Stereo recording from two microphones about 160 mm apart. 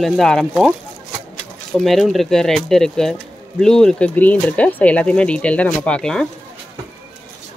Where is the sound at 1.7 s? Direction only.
Centre (ahead or behind).